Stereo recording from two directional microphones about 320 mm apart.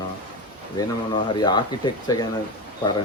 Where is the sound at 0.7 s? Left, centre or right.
Centre.